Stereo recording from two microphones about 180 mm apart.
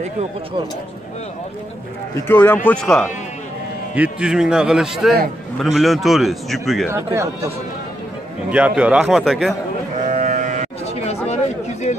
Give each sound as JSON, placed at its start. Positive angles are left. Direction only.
{"t": 2.1, "sound": "speech", "side_deg": 10}
{"t": 3.9, "sound": "speech", "side_deg": -5}
{"t": 8.5, "sound": "speech", "side_deg": -5}
{"t": 10.0, "sound": "livestock", "side_deg": -45}
{"t": 11.2, "sound": "chatter", "side_deg": 40}